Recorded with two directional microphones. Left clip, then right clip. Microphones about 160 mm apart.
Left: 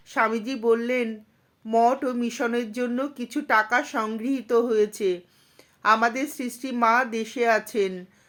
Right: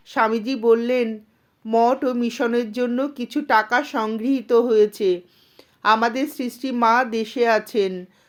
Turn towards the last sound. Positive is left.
turn(degrees=-30)  # may be behind; listen again after turning